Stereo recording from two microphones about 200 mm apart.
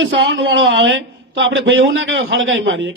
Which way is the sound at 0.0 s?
70° right (ahead or behind).